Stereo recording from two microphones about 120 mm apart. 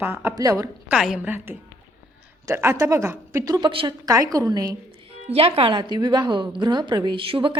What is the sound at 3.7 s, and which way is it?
Speech, 45° right (ahead or behind).